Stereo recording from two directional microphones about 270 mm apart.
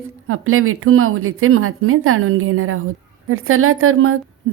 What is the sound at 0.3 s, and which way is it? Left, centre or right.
A woman's voice, right.